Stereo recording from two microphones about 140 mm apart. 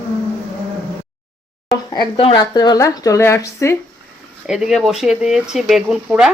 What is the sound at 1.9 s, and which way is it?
Speech, 35° left (ahead or behind).